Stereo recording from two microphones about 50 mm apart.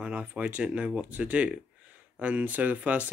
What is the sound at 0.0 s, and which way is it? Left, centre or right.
Speech, right.